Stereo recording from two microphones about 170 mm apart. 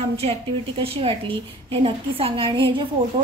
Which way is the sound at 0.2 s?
35° right (ahead or behind).